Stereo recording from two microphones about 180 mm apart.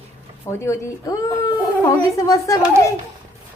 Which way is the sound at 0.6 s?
15° left (ahead or behind).